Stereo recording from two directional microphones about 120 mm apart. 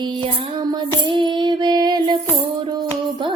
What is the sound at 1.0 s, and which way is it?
Child singing, 40° right (ahead or behind).